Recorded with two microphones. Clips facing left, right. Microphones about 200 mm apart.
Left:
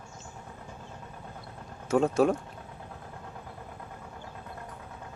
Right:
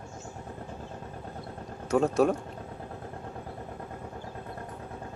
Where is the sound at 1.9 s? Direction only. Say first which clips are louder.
Even; centre (ahead or behind).